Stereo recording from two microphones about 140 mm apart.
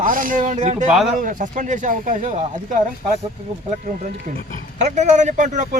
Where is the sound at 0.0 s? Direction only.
75° right (ahead or behind); by 0.9 s 55° right (ahead or behind).